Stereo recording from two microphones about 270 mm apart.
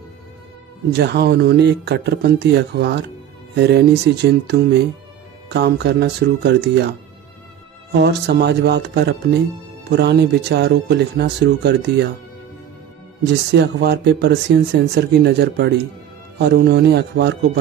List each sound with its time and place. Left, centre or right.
0.9 s speech: right
7.9 s speech: right
13.5 s speech: right